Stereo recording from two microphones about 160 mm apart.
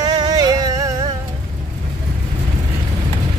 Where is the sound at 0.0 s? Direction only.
25° right (ahead or behind).